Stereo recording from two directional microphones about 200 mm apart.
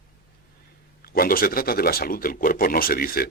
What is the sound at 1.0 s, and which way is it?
Speech, 50° left (ahead or behind).